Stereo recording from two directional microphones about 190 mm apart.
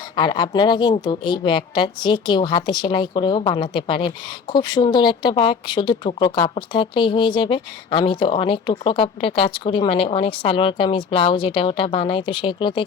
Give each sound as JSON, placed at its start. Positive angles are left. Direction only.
{"t": 0.2, "sound": "speech", "side_deg": 25}